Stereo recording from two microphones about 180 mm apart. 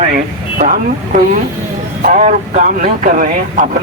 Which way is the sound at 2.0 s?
45° right (ahead or behind).